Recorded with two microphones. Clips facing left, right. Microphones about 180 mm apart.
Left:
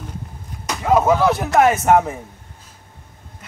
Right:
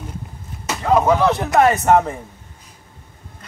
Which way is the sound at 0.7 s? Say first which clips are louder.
Even; centre (ahead or behind).